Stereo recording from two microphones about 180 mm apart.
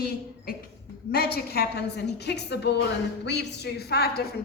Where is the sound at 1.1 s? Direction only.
60° left (ahead or behind).